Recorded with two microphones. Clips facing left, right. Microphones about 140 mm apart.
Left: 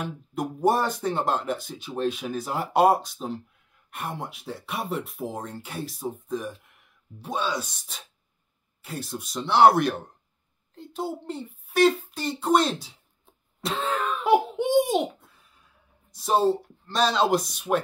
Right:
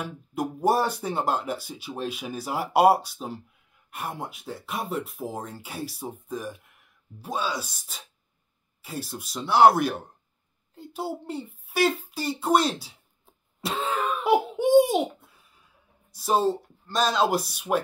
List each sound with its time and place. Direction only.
0.0 s speech: centre (ahead or behind)
10.7 s a sound: 5° right (ahead or behind)
16.1 s speech: centre (ahead or behind)